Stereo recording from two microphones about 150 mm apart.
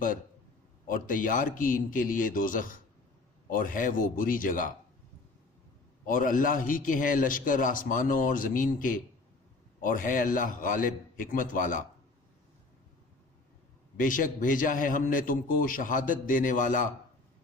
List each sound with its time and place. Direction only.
0.9 s a man's voice: 65° left (ahead or behind)
6.1 s a man's voice: 65° left (ahead or behind)
13.9 s a man's voice: 65° left (ahead or behind)